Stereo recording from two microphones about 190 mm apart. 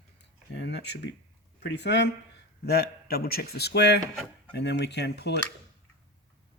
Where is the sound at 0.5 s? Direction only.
65° left (ahead or behind).